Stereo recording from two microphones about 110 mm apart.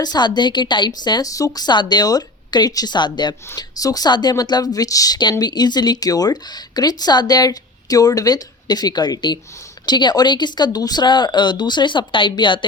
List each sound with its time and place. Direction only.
0.0 s speech: 40° left (ahead or behind)